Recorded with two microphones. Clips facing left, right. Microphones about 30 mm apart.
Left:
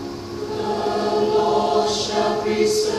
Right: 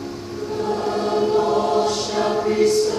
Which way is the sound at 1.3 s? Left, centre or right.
Centre.